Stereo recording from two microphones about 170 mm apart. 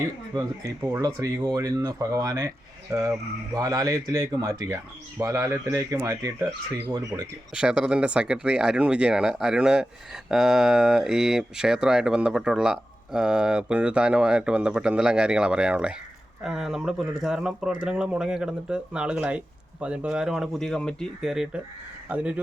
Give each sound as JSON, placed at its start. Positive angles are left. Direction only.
{"t": 0.0, "sound": "speech", "side_deg": -20}
{"t": 7.5, "sound": "speech", "side_deg": -5}